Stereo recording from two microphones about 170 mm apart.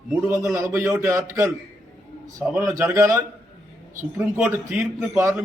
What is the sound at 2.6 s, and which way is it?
A man's voice, 15° right (ahead or behind).